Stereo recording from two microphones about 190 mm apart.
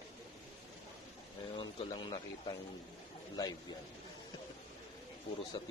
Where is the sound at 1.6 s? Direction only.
25° left (ahead or behind).